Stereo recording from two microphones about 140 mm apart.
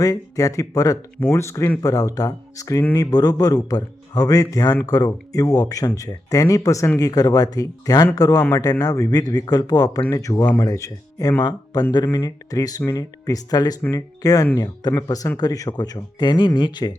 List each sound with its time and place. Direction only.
0.0 s speech: 25° left (ahead or behind)